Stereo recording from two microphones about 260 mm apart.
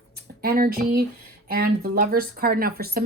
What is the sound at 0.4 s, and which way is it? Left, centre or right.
Speech, right.